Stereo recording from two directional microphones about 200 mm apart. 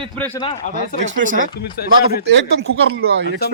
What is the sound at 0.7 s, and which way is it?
Speech, 40° left (ahead or behind).